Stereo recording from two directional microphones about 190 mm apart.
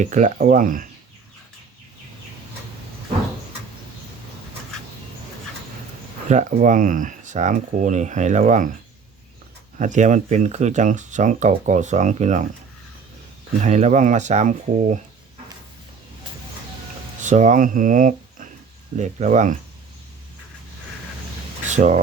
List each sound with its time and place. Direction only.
0.0 s speech: 40° right (ahead or behind)
6.2 s speech: 40° right (ahead or behind)
9.7 s speech: 40° right (ahead or behind)
13.6 s speech: 40° right (ahead or behind)
17.2 s speech: 40° right (ahead or behind)
21.7 s speech: 40° right (ahead or behind)